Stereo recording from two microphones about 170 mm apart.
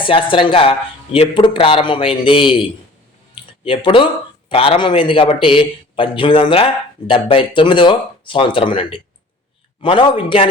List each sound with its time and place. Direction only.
0.1 s speech: 30° left (ahead or behind)